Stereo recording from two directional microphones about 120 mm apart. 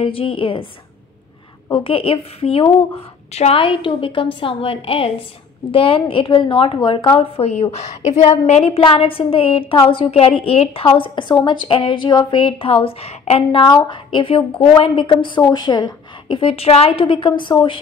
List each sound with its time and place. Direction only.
0.0 s a woman's voice: 50° left (ahead or behind)
1.7 s a woman's voice: 50° left (ahead or behind)
13.6 s a woman's voice: 40° left (ahead or behind)